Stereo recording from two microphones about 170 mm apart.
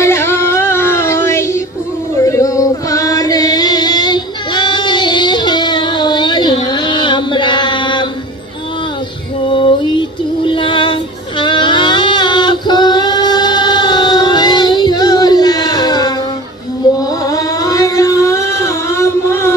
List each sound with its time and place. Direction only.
0.0 s music: 15° left (ahead or behind)
2.1 s chant: 15° left (ahead or behind)
9.5 s female singing: 30° left (ahead or behind)
17.2 s a sound: 20° left (ahead or behind)